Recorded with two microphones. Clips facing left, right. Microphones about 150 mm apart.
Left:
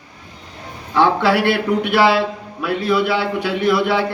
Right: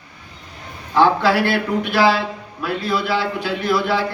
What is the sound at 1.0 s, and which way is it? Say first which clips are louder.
A man's voice: even; 65° left (ahead or behind).